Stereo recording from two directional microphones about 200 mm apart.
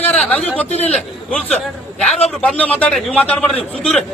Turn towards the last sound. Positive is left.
turn(degrees=5)  # may be behind; listen again after turning